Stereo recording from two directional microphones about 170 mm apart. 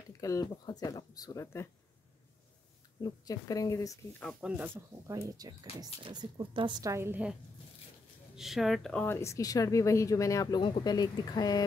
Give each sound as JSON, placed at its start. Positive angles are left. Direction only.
{"t": 0.2, "sound": "speech", "side_deg": 20}
{"t": 3.0, "sound": "speech", "side_deg": 20}
{"t": 4.2, "sound": "speech", "side_deg": 0}
{"t": 6.9, "sound": "speech", "side_deg": -15}
{"t": 8.4, "sound": "speech", "side_deg": 0}
{"t": 9.0, "sound": "speech", "side_deg": 15}